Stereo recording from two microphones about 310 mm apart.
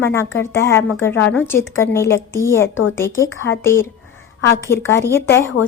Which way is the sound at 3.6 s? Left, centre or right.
Centre.